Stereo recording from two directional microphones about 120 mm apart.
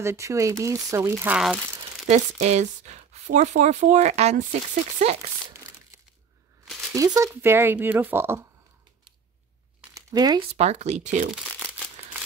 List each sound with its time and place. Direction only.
0.0 s speech: 25° right (ahead or behind)
2.0 s speech: 75° right (ahead or behind)
6.7 s a sound: centre (ahead or behind)
7.0 s speech: 25° right (ahead or behind)
9.9 s speech: 30° right (ahead or behind)
10.5 s speech: 65° right (ahead or behind); by 11.2 s 80° right